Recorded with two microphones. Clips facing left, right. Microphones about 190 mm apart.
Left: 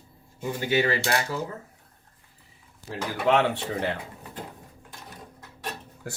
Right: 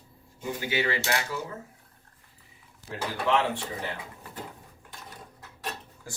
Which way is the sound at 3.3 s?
65° left (ahead or behind).